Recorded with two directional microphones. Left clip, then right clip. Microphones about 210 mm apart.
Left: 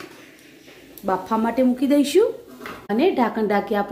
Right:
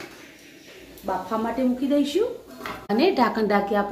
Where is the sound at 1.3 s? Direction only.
55° left (ahead or behind).